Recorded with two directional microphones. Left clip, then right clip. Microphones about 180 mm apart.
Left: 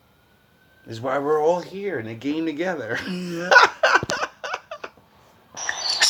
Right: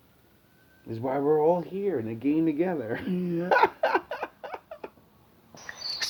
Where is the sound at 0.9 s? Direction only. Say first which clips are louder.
Left 3 dB; 20° right (ahead or behind).